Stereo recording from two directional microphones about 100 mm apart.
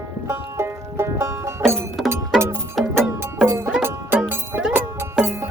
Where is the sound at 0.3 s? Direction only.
25° right (ahead or behind).